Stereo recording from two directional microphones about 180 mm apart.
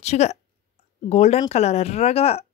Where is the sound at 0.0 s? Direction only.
35° left (ahead or behind).